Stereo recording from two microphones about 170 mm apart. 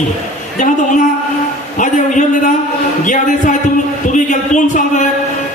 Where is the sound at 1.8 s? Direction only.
45° left (ahead or behind).